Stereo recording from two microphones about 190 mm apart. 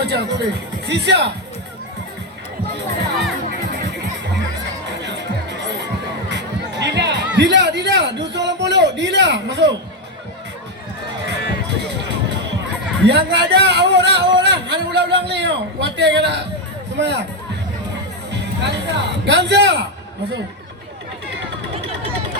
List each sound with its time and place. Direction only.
0.1 s speech: 65° right (ahead or behind)
4.9 s music: 65° right (ahead or behind)
7.3 s a sound: 65° right (ahead or behind)
11.3 s music: 65° right (ahead or behind)
13.1 s speech: 65° right (ahead or behind)
18.3 s a man's voice: 65° right (ahead or behind)